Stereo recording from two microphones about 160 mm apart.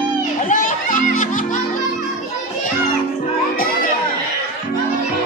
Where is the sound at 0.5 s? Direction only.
55° left (ahead or behind).